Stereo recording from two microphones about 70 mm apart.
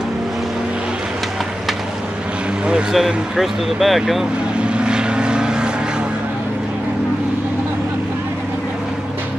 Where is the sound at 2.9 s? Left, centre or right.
Centre.